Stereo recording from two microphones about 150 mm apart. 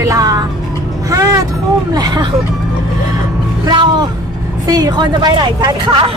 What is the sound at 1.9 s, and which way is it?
Speech, 25° right (ahead or behind).